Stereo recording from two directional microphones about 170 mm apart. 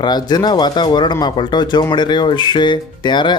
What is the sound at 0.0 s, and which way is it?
Speech, 25° left (ahead or behind).